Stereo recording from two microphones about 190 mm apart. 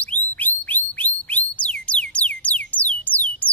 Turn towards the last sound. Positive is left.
turn(degrees=10)  # may be behind; listen again after turning